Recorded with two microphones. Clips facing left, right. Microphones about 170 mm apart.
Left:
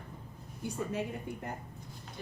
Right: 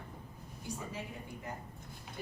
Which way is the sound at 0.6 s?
60° left (ahead or behind).